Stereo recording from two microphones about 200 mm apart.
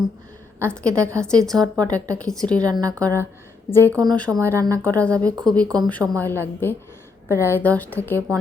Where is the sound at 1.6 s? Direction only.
15° right (ahead or behind).